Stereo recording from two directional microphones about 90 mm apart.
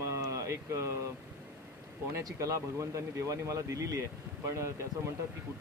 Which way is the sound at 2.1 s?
35° right (ahead or behind).